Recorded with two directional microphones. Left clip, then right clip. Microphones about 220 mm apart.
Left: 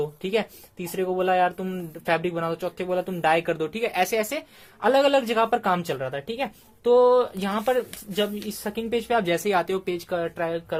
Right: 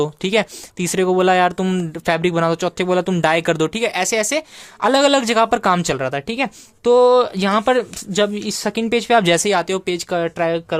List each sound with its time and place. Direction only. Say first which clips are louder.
0.0 s speech: right 8 dB; 45° right (ahead or behind)